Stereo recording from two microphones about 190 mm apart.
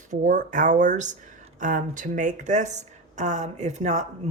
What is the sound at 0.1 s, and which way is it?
A woman's voice, 40° right (ahead or behind).